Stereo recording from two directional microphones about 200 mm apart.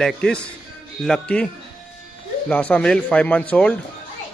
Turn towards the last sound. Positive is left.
turn(degrees=5)  # may be behind; listen again after turning